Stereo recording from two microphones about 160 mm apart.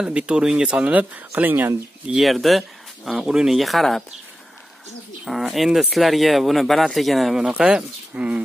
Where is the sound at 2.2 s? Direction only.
Centre (ahead or behind).